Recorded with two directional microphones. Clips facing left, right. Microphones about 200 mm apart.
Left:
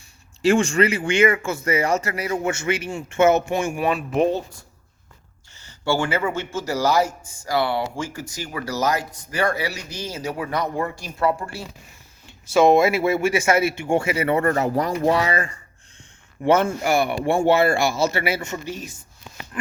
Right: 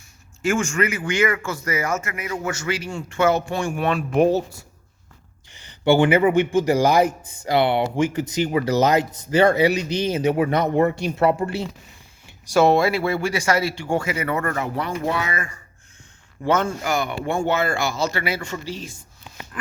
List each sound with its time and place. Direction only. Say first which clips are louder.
0.4 s speech: left 4 dB; 35° left (ahead or behind)
3.7 s speech: even; 5° left (ahead or behind); by 11.7 s 25° right (ahead or behind)
12.5 s speech: left 1 dB; 5° right (ahead or behind)
12.7 s speech: left 2 dB; 20° left (ahead or behind)